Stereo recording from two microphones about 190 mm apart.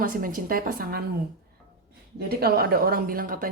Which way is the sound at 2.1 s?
55° right (ahead or behind).